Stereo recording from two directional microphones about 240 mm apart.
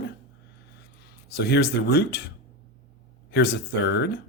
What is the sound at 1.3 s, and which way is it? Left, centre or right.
Speech, left.